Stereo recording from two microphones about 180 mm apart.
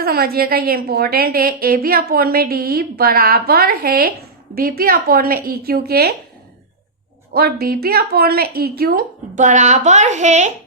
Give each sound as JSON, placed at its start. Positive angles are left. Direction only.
{"t": 0.0, "sound": "a woman's voice", "side_deg": -60}
{"t": 7.3, "sound": "a woman's voice", "side_deg": -55}